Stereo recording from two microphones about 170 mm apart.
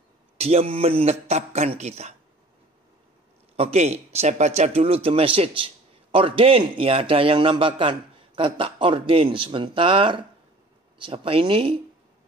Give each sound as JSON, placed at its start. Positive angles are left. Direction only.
{"t": 0.4, "sound": "a man's voice", "side_deg": -35}
{"t": 3.5, "sound": "a man's voice", "side_deg": -35}